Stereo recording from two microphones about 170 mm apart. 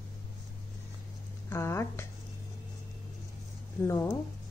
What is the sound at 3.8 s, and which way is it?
Speech, 15° left (ahead or behind).